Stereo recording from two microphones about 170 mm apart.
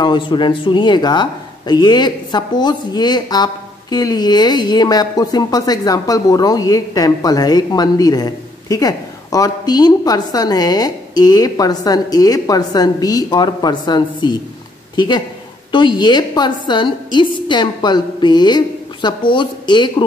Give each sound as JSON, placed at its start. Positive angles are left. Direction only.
{"t": 0.0, "sound": "speech", "side_deg": 25}